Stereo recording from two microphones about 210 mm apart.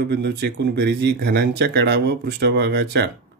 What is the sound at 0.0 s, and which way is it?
Speech, 50° right (ahead or behind).